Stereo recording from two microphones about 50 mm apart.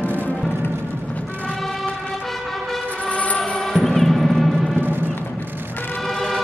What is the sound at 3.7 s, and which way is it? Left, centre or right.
Music, centre.